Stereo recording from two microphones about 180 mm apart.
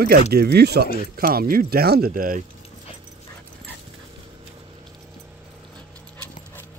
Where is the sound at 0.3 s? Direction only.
60° right (ahead or behind).